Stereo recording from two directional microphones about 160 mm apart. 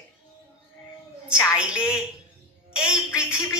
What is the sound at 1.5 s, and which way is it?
Speech, 5° right (ahead or behind).